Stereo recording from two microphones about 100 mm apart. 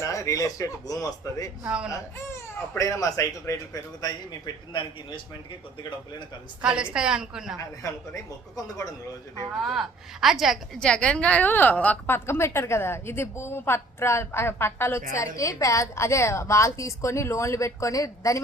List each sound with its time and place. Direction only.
0.0 s speech: 30° left (ahead or behind)
1.6 s a woman's voice: 10° right (ahead or behind)
1.9 s speech: 30° left (ahead or behind); by 5.2 s 50° left (ahead or behind)
6.6 s a woman's voice: 10° right (ahead or behind)
7.6 s speech: 30° left (ahead or behind)
9.6 s a woman's voice: centre (ahead or behind)
10.8 s a woman's voice: 10° left (ahead or behind); by 18.3 s 35° left (ahead or behind)